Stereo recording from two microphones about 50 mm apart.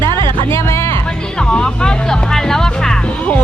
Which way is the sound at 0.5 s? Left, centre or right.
Left.